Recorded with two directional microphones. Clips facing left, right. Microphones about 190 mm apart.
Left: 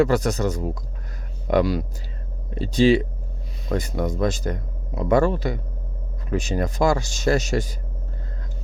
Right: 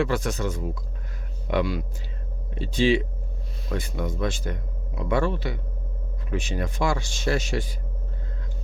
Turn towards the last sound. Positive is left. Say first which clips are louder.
# left 5 dB
turn(degrees=40)  # may be behind; listen again after turning